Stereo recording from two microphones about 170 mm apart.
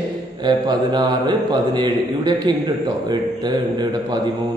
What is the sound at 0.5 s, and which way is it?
A man's voice, 25° right (ahead or behind).